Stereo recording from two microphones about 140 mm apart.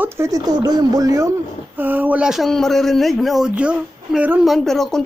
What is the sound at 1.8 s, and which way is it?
Speech, 15° right (ahead or behind).